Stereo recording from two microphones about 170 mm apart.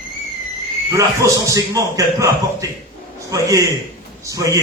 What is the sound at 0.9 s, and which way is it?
A man's voice, 20° right (ahead or behind).